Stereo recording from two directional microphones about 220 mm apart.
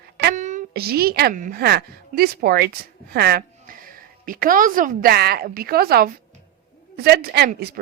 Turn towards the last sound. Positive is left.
turn(degrees=-45)  # may be behind; listen again after turning